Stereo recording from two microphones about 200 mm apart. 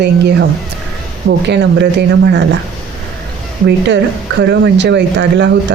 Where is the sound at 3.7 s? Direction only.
60° right (ahead or behind).